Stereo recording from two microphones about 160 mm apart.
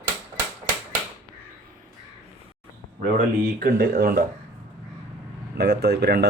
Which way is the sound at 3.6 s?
70° right (ahead or behind).